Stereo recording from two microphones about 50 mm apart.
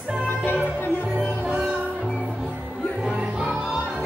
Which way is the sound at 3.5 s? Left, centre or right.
Centre.